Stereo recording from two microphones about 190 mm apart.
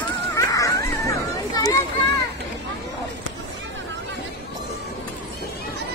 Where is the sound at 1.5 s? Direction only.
20° left (ahead or behind).